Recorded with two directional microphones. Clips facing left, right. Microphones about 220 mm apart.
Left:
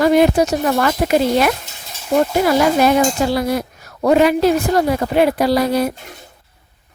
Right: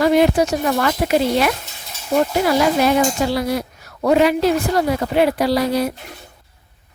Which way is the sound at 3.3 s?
50° left (ahead or behind).